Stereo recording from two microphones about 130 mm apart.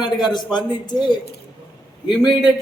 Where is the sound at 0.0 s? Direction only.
35° left (ahead or behind).